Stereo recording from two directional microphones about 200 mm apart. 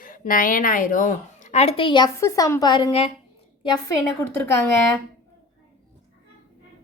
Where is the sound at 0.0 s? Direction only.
45° left (ahead or behind); by 3.9 s 20° left (ahead or behind).